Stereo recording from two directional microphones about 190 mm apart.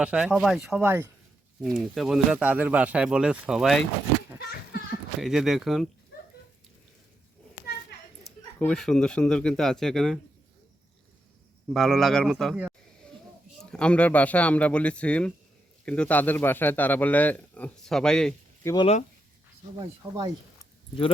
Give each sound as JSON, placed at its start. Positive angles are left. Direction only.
{"t": 0.0, "sound": "speech", "side_deg": -5}
{"t": 0.8, "sound": "speech", "side_deg": -10}
{"t": 1.6, "sound": "speech", "side_deg": 0}
{"t": 5.2, "sound": "speech", "side_deg": 0}
{"t": 8.5, "sound": "speech", "side_deg": 5}
{"t": 11.7, "sound": "a man's voice", "side_deg": 0}
{"t": 18.6, "sound": "speech", "side_deg": 20}
{"t": 19.7, "sound": "speech", "side_deg": -20}